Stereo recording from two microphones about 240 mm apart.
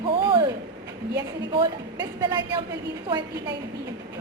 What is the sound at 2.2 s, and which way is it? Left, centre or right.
Speech, centre.